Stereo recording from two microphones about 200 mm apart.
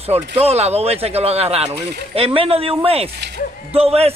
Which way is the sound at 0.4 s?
30° right (ahead or behind).